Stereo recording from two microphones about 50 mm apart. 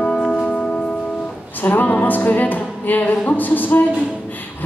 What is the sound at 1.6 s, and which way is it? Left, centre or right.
Music, left.